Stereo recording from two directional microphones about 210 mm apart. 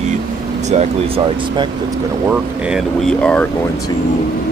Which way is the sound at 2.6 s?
Centre (ahead or behind).